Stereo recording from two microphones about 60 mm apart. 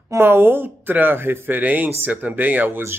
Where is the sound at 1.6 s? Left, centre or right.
Right.